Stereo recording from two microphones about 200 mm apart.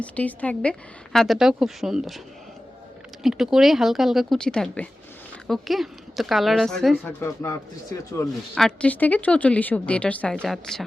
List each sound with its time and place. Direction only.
0.0 s a woman's voice: 5° left (ahead or behind)
3.2 s a woman's voice: centre (ahead or behind)
7.2 s speech: 15° left (ahead or behind)
8.5 s speech: 5° left (ahead or behind)